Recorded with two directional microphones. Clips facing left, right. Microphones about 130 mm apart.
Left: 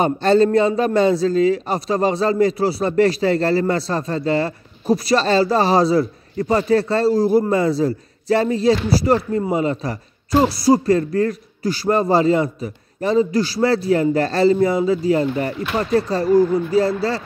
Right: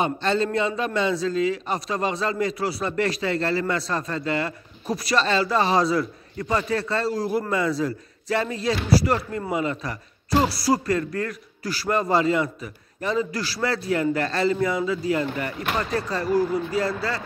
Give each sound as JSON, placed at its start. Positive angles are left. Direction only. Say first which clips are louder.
{"t": 0.0, "sound": "a man's voice", "louder": "left 8 dB", "side_deg": 40}